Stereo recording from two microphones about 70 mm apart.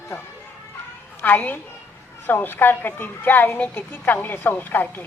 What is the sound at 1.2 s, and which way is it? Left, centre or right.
Speech, left.